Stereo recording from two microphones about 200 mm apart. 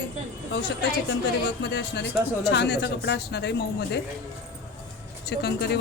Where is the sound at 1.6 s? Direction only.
60° left (ahead or behind).